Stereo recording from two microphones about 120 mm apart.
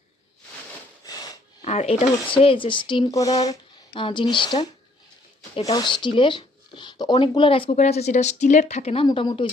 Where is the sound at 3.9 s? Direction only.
45° left (ahead or behind).